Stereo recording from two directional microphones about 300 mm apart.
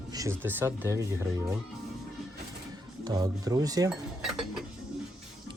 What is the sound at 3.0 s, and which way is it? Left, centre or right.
Speech, centre.